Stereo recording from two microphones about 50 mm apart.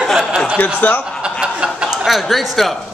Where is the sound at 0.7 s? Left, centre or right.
Left.